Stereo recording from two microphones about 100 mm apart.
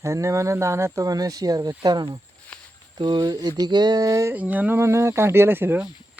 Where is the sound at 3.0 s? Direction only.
50° right (ahead or behind); by 4.3 s 35° right (ahead or behind).